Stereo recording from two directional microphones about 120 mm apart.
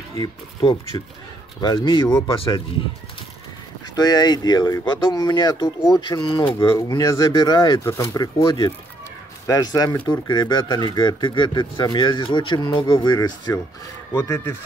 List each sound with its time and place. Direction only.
0.2 s speech: 40° left (ahead or behind)
3.9 s speech: 35° left (ahead or behind)
6.4 s speech: 20° left (ahead or behind)
14.1 s speech: 20° left (ahead or behind)